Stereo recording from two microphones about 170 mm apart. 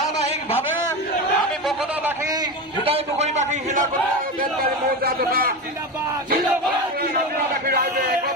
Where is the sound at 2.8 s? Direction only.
35° right (ahead or behind); by 5.5 s 60° right (ahead or behind).